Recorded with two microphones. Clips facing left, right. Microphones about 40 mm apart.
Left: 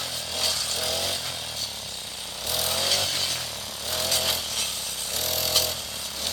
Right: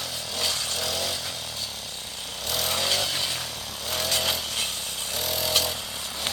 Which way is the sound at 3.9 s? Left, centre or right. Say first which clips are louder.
Right 1 dB; centre.